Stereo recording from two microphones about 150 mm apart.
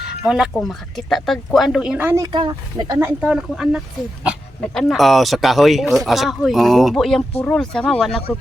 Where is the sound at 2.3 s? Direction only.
30° right (ahead or behind).